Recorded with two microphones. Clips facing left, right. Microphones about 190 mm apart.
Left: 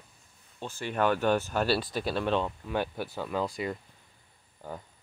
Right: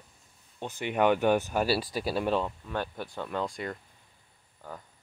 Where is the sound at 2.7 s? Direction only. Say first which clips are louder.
Left 3 dB; 5° left (ahead or behind).